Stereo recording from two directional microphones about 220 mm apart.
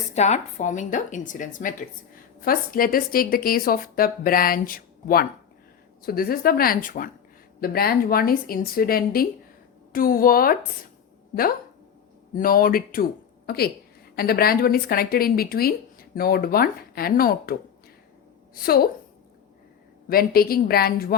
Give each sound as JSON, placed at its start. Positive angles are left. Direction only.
{"t": 0.1, "sound": "a woman's voice", "side_deg": 30}
{"t": 12.4, "sound": "speech", "side_deg": 40}
{"t": 14.2, "sound": "a woman's voice", "side_deg": 45}
{"t": 20.1, "sound": "a woman's voice", "side_deg": 40}